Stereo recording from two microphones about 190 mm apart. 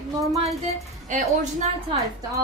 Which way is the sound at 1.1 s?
40° right (ahead or behind).